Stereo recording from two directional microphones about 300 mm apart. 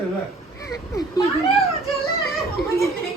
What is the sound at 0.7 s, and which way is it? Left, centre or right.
Speech, centre.